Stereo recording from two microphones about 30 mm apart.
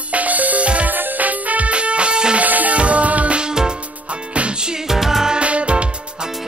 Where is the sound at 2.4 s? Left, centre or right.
Right.